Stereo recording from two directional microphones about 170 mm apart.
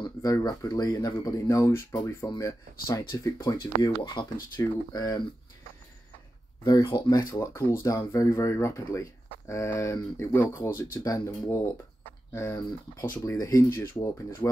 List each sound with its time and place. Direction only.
0.0 s speech: 20° left (ahead or behind)
6.6 s speech: 20° left (ahead or behind)